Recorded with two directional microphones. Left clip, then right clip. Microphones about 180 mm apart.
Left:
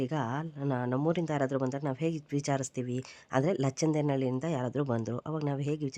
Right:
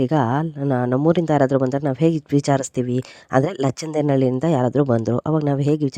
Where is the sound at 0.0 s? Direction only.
50° right (ahead or behind).